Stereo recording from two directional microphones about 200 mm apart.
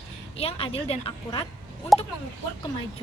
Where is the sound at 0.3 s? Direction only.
30° left (ahead or behind).